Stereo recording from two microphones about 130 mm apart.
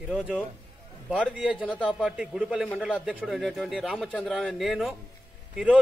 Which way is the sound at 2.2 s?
5° right (ahead or behind).